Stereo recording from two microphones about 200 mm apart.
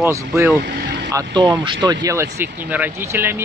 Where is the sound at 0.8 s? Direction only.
60° right (ahead or behind).